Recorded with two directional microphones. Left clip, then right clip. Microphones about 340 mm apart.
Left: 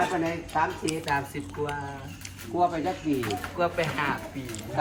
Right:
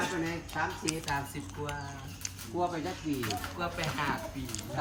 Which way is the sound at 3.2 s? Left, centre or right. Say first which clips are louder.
Left 7 dB; centre.